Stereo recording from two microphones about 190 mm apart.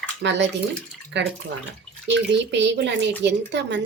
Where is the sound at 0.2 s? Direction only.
70° right (ahead or behind).